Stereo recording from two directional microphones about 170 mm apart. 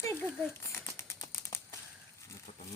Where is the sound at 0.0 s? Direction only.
10° left (ahead or behind).